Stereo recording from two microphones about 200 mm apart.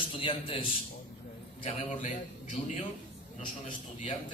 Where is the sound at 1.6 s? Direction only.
35° left (ahead or behind).